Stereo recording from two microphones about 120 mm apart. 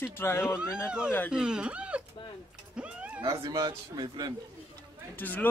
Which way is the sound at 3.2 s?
30° right (ahead or behind).